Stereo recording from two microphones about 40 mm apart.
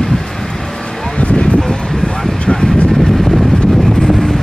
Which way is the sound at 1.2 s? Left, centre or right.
Left.